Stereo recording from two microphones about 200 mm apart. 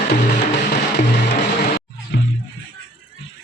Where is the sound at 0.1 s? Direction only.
55° left (ahead or behind).